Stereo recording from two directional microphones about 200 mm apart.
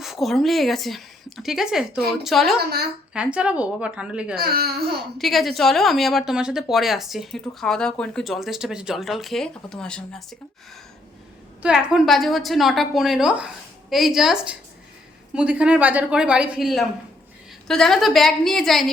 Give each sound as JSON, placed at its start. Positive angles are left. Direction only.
{"t": 0.0, "sound": "a woman's voice", "side_deg": 0}
{"t": 4.4, "sound": "speech", "side_deg": -50}
{"t": 5.1, "sound": "speech", "side_deg": 0}
{"t": 11.6, "sound": "speech", "side_deg": -5}